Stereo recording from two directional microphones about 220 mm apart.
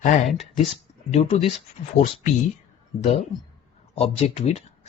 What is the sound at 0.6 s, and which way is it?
Speech, 25° left (ahead or behind).